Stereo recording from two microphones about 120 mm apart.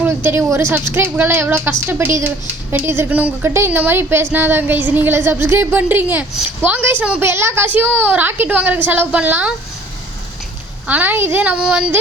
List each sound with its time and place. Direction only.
0.0 s a woman's voice: 20° right (ahead or behind)
7.3 s a woman's voice: 20° right (ahead or behind)
10.8 s a woman's voice: 15° right (ahead or behind)